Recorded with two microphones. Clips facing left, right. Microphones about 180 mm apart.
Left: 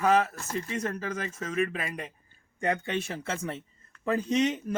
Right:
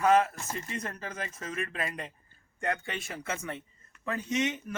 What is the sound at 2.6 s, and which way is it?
Speech, 20° left (ahead or behind).